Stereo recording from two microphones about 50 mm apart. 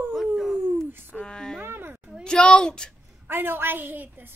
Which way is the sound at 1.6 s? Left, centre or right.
Right.